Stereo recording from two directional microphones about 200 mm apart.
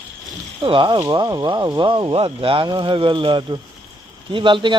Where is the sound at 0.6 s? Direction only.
25° right (ahead or behind).